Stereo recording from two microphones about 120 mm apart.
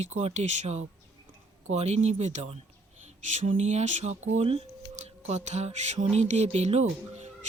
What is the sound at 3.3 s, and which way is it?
Speech, 90° right.